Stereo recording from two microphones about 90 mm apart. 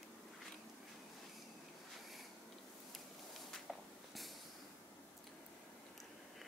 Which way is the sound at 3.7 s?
Centre (ahead or behind).